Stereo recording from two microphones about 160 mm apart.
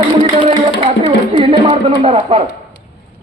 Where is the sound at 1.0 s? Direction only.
40° right (ahead or behind).